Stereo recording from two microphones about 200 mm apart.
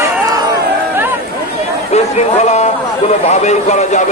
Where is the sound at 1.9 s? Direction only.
35° left (ahead or behind).